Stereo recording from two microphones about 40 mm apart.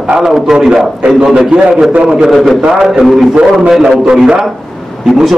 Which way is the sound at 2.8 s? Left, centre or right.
Centre.